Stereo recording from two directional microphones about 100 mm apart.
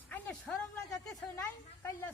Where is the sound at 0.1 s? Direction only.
15° left (ahead or behind).